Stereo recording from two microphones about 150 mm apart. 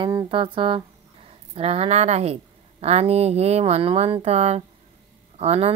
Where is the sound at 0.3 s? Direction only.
35° right (ahead or behind).